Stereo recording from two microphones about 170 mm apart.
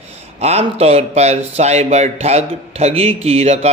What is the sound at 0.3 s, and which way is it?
Speech, 40° right (ahead or behind).